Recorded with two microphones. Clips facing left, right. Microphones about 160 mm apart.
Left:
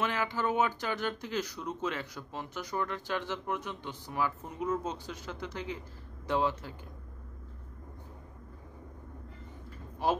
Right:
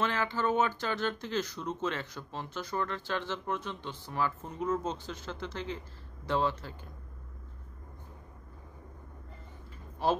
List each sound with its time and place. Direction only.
0.0 s speech: 15° left (ahead or behind)
10.0 s speech: 15° left (ahead or behind)